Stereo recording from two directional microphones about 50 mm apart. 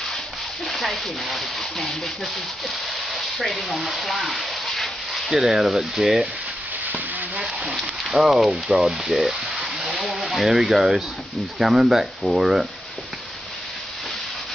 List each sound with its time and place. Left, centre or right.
0.7 s speech: centre
3.1 s sizzle: centre
3.6 s speech: centre
4.6 s dog: centre
5.3 s speech: centre
6.9 s stir: right
8.2 s speech: centre
9.5 s a sound: centre
10.2 s speech: centre